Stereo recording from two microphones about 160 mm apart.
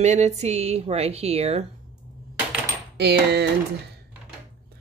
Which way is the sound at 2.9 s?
90° right.